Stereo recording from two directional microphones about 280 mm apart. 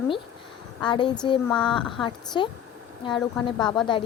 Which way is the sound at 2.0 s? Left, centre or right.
Centre.